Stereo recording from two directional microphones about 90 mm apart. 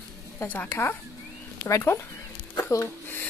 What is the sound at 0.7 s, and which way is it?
Speech, 30° left (ahead or behind).